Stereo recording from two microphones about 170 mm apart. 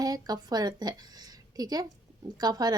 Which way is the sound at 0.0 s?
20° right (ahead or behind).